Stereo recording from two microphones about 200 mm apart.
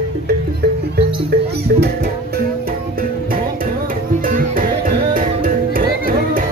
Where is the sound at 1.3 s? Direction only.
45° right (ahead or behind).